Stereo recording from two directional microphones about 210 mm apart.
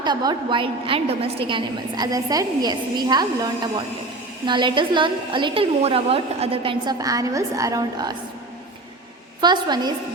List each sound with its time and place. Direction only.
0.0 s a woman's voice: 20° right (ahead or behind)
9.4 s a woman's voice: 20° right (ahead or behind)